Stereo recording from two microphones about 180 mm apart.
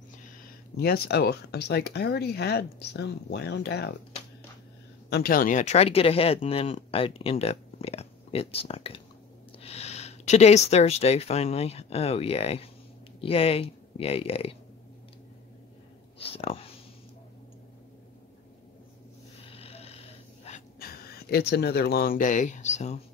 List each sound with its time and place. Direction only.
0.7 s speech: 60° left (ahead or behind)
5.1 s speech: 55° left (ahead or behind); by 14.6 s 30° left (ahead or behind)
16.2 s speech: 30° left (ahead or behind)
19.4 s a sound: 30° left (ahead or behind)
20.8 s speech: 55° left (ahead or behind); by 22.9 s 40° left (ahead or behind)